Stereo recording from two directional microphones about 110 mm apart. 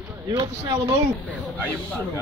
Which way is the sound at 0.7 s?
35° right (ahead or behind).